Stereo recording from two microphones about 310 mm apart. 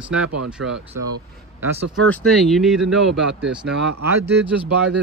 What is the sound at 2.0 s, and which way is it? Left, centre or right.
Speech, centre.